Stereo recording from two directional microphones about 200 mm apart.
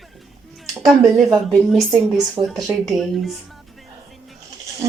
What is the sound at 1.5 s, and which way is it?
A woman's voice, centre (ahead or behind).